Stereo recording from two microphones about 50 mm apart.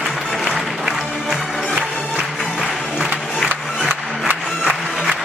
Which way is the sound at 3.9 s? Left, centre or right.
Right.